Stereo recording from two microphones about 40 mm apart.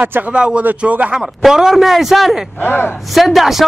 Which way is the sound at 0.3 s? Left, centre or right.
Right.